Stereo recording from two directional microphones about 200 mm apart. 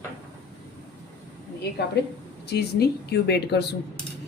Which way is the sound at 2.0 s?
55° left (ahead or behind).